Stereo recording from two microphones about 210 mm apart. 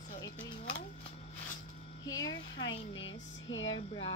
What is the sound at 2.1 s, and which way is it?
Speech, 20° left (ahead or behind).